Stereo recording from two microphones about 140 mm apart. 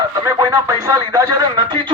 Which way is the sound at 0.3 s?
30° right (ahead or behind).